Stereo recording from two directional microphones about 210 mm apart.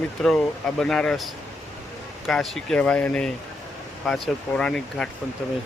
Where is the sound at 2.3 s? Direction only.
Centre (ahead or behind).